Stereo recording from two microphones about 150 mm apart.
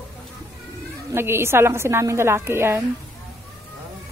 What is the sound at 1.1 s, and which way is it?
A woman's voice, 15° right (ahead or behind).